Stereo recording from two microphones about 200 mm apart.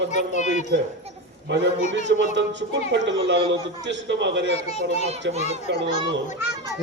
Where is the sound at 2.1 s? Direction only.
60° right (ahead or behind).